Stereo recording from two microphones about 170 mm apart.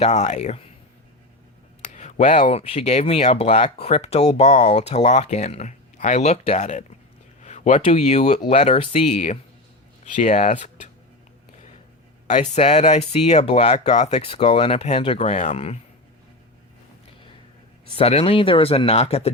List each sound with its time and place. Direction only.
0.0 s speech: 40° left (ahead or behind)
1.9 s speech: 45° left (ahead or behind)
7.4 s a sound: 45° left (ahead or behind)
7.9 s speech: 40° left (ahead or behind)
12.3 s speech: 45° left (ahead or behind)
17.9 s speech: 35° left (ahead or behind)